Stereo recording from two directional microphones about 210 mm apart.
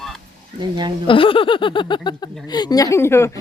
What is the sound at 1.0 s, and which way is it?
A woman's voice, 25° left (ahead or behind).